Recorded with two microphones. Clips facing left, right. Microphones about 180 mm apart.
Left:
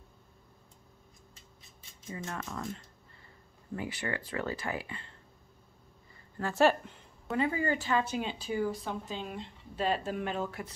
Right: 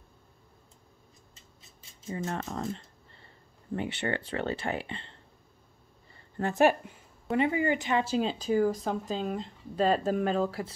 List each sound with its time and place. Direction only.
2.0 s speech: 30° right (ahead or behind)
6.3 s speech: 20° right (ahead or behind)